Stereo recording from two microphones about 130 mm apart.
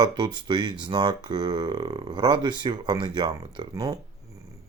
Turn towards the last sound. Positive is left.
turn(degrees=-30)  # may be behind; listen again after turning